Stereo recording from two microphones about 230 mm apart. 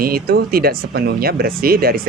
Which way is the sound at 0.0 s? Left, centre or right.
Right.